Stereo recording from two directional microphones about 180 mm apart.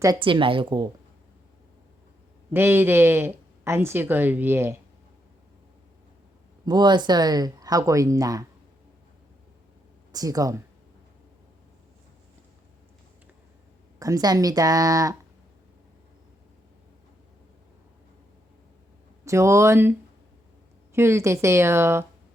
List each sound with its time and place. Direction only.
0.0 s speech: 25° right (ahead or behind)
2.5 s speech: 10° right (ahead or behind)
6.7 s speech: 25° right (ahead or behind)
10.1 s speech: 20° right (ahead or behind)
14.0 s speech: 20° right (ahead or behind)
19.2 s speech: 15° right (ahead or behind)